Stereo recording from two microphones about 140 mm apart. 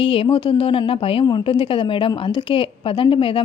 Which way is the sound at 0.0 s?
40° left (ahead or behind).